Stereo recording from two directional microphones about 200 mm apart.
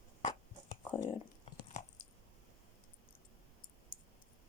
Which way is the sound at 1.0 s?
25° left (ahead or behind).